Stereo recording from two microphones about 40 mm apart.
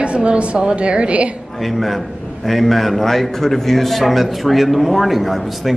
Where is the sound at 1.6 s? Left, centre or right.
Centre.